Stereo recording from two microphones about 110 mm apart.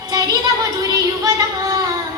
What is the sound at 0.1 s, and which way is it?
Child singing, 35° right (ahead or behind).